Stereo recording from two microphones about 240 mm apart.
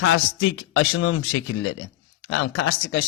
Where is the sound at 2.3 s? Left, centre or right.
Left.